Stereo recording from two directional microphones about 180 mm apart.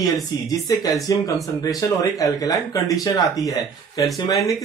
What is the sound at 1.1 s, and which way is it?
Speech, 20° left (ahead or behind).